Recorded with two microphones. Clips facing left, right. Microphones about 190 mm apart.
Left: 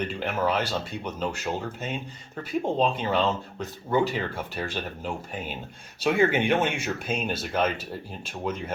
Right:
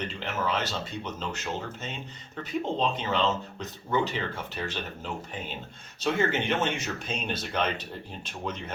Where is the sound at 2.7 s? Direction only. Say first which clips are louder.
Left 4 dB; 10° left (ahead or behind).